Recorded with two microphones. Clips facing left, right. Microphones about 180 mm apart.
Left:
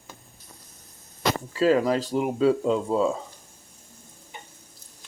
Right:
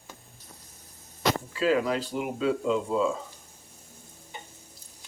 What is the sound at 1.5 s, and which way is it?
Speech, 40° left (ahead or behind).